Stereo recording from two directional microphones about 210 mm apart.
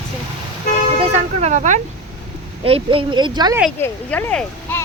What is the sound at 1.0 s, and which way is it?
Vehicle, 30° right (ahead or behind).